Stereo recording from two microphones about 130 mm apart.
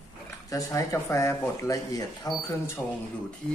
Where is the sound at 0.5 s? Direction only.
25° left (ahead or behind).